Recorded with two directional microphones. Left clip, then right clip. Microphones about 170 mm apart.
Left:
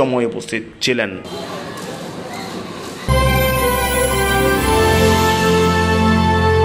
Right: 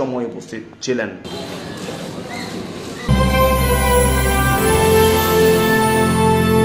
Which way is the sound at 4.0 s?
Centre (ahead or behind).